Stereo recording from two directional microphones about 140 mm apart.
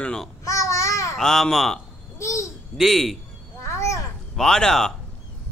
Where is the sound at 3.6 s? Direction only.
20° left (ahead or behind).